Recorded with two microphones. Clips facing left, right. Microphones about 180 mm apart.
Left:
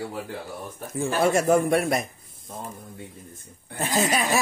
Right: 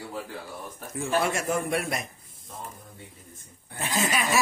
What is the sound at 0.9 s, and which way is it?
A man's voice, 30° left (ahead or behind).